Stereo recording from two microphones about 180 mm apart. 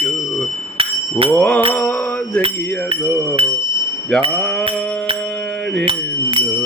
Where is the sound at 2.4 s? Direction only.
30° right (ahead or behind).